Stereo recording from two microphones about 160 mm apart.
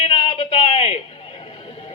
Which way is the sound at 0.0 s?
35° left (ahead or behind).